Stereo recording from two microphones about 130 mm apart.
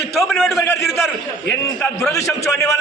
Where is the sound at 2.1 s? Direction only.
25° left (ahead or behind).